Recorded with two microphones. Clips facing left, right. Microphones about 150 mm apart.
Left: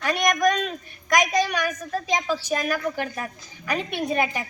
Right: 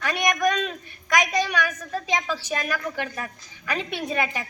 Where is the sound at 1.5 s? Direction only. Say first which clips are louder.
Left 1 dB; 15° left (ahead or behind).